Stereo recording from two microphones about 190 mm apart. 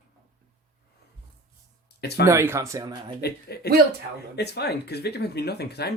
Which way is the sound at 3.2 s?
55° left (ahead or behind).